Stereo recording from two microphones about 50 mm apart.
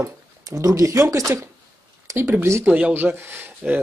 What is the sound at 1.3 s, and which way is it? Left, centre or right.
Speech, right.